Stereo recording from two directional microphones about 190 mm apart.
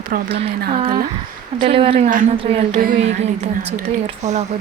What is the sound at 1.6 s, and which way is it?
Speech, 30° right (ahead or behind).